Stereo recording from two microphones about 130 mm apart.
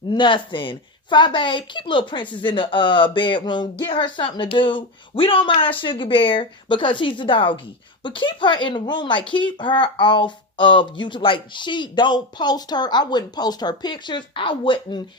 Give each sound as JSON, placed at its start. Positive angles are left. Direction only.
{"t": 0.1, "sound": "speech", "side_deg": 35}